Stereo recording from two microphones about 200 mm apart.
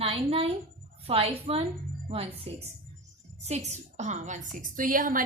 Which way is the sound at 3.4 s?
35° right (ahead or behind).